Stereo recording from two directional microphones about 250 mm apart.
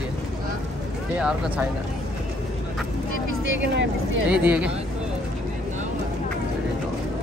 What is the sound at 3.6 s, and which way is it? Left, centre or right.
Speech, right.